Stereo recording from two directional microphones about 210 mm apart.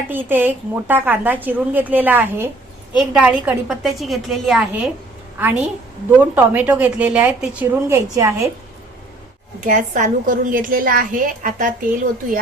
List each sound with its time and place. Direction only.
0.1 s a woman's voice: 10° right (ahead or behind)
9.6 s a woman's voice: 40° right (ahead or behind)